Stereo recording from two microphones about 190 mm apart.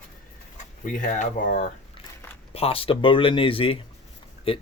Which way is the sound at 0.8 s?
45° left (ahead or behind).